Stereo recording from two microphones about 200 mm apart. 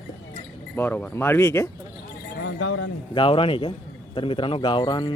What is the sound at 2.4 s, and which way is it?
Speech, 85° left.